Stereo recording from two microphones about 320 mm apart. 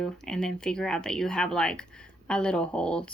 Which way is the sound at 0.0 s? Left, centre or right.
Centre.